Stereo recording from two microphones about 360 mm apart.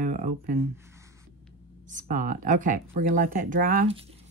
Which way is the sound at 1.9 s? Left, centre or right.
Right.